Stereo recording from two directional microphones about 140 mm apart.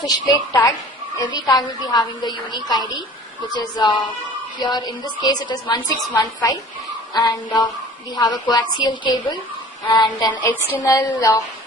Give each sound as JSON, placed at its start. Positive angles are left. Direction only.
{"t": 0.3, "sound": "a woman's voice", "side_deg": 25}
{"t": 7.1, "sound": "a woman's voice", "side_deg": 35}
{"t": 10.3, "sound": "a woman's voice", "side_deg": 15}